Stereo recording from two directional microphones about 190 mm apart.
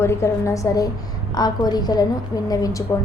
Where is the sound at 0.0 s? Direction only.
15° left (ahead or behind).